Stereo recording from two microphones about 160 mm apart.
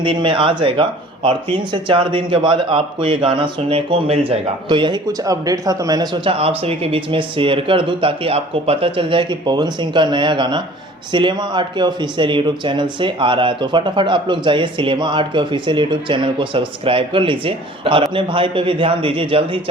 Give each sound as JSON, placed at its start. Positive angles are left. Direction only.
{"t": 0.0, "sound": "speech", "side_deg": -30}
{"t": 6.6, "sound": "speech", "side_deg": -35}